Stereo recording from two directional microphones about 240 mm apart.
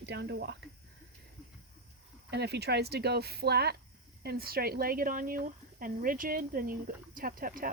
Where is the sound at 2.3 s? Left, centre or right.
Right.